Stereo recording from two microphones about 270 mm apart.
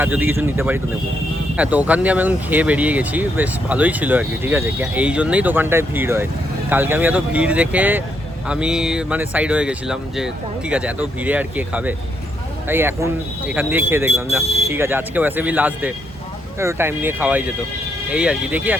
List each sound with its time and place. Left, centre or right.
0.0 s speech: centre
14.4 s speech: left
14.7 s speech: centre